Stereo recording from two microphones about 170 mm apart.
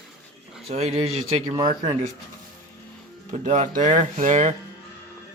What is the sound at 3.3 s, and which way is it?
Speech, 45° right (ahead or behind).